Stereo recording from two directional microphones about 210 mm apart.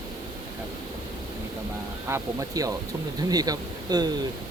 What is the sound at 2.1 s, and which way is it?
Speech, 15° right (ahead or behind).